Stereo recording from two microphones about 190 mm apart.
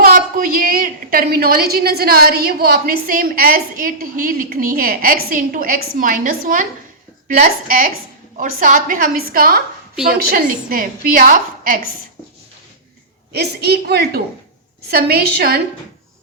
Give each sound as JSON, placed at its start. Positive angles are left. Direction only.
{"t": 0.0, "sound": "a woman's voice", "side_deg": -50}
{"t": 13.3, "sound": "a woman's voice", "side_deg": -60}